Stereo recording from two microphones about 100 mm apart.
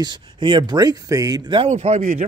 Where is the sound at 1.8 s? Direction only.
90° right.